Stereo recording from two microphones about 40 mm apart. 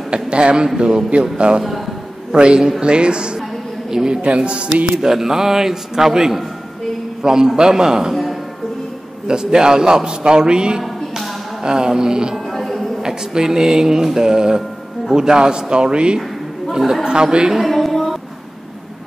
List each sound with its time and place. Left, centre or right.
0.1 s a man's voice: right
2.3 s a man's voice: right
5.0 s music: centre
9.3 s a man's voice: centre
10.8 s a sound: centre
11.6 s a man's voice: centre
12.5 s music: centre
13.0 s music: centre
15.1 s a man's voice: centre
16.7 s music: centre
17.1 s a man's voice: right
17.6 s a sound: centre